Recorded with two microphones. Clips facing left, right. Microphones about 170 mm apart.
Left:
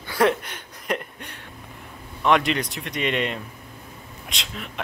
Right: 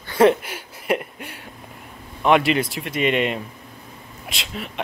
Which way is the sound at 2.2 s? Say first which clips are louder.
Right 3 dB; 5° right (ahead or behind).